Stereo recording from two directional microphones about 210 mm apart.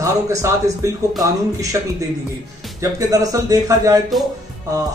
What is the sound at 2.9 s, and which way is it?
Speech, 15° right (ahead or behind).